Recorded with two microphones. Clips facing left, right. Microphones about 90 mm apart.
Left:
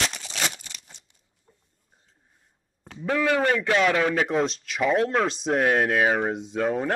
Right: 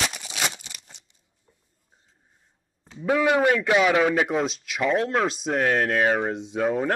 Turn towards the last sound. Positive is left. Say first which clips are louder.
# right 1 dB
turn(degrees=0)  # may be behind; listen again after turning